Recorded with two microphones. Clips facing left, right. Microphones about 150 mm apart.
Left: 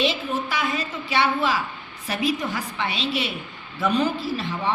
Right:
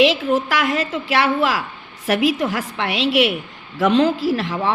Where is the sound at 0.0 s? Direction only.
90° right.